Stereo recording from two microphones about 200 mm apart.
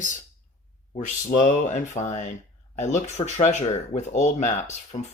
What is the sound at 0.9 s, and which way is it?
Speech, 40° left (ahead or behind).